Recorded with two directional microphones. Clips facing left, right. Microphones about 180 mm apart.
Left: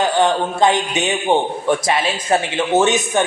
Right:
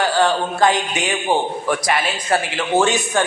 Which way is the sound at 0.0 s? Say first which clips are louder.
Left 1 dB; 20° left (ahead or behind).